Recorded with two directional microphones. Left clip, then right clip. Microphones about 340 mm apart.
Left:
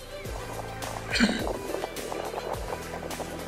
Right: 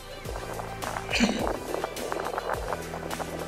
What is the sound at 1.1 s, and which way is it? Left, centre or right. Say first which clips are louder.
Music: left 1 dB; centre.